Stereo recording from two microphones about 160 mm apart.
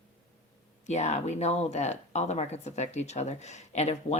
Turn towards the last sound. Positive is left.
turn(degrees=45)  # may be behind; listen again after turning